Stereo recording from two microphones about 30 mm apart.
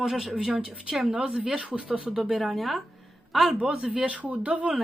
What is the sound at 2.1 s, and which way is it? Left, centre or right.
Speech, centre.